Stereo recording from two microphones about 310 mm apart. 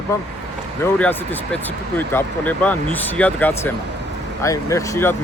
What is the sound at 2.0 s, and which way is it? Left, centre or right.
Speech, centre.